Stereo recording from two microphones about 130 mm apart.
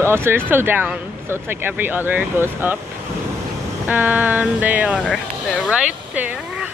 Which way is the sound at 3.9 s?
10° right (ahead or behind).